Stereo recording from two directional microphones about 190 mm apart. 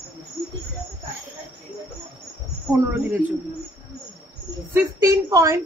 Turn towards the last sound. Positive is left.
turn(degrees=-15)  # may be behind; listen again after turning